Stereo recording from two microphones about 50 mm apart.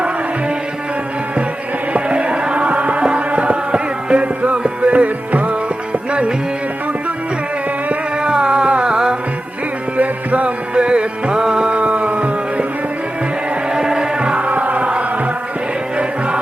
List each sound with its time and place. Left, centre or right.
1.9 s music: right
7.9 s a sound: right
10.0 s music: right
13.7 s music: centre